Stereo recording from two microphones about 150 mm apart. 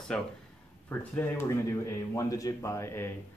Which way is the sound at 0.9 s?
15° left (ahead or behind).